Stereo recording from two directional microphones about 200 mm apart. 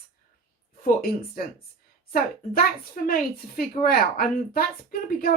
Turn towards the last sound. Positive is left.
turn(degrees=45)  # may be behind; listen again after turning